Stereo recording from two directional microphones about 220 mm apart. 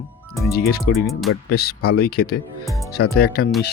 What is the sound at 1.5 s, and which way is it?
Speech, 45° left (ahead or behind).